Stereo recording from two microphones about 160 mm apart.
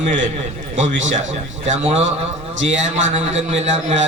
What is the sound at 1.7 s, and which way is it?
A man's voice, 45° right (ahead or behind).